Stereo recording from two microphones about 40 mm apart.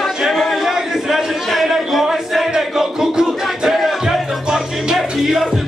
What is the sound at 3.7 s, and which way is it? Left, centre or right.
Music, centre.